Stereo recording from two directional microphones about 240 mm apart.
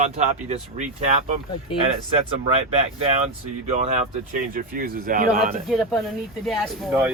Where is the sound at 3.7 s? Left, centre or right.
Right.